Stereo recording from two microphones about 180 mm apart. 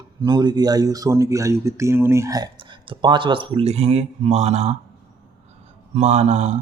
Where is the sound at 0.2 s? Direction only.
25° right (ahead or behind).